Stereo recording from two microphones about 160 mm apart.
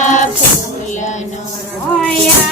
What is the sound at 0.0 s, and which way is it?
Music, 50° left (ahead or behind).